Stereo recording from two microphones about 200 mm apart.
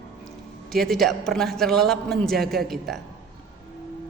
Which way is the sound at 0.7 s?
Centre (ahead or behind).